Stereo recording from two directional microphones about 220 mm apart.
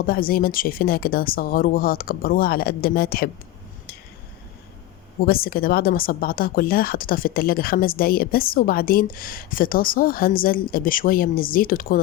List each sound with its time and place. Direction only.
0.0 s speech: 40° left (ahead or behind)
5.2 s speech: 45° left (ahead or behind)